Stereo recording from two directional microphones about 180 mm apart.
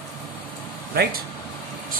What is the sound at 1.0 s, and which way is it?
Speech, 60° right (ahead or behind).